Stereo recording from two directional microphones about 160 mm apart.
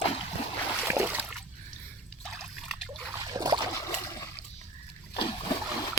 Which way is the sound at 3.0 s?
20° right (ahead or behind).